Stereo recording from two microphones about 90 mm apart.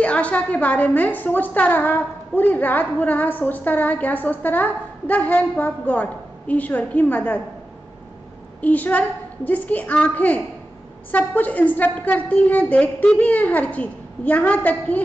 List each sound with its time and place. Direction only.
0.0 s a woman's voice: 15° left (ahead or behind)
8.5 s a woman's voice: 20° left (ahead or behind)